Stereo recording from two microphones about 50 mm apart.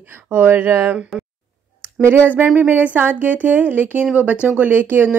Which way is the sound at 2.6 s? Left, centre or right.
Right.